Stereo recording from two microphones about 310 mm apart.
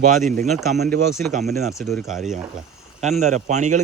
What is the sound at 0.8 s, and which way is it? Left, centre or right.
Speech, right.